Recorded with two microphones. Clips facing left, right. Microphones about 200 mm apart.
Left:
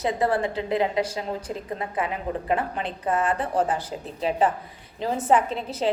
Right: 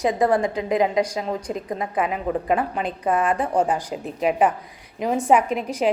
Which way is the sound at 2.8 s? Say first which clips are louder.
Right 3 dB; 15° right (ahead or behind).